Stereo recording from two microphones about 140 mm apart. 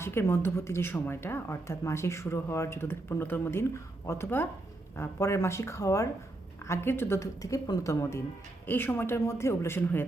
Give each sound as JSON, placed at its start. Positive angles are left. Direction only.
{"t": 0.0, "sound": "a woman's voice", "side_deg": 15}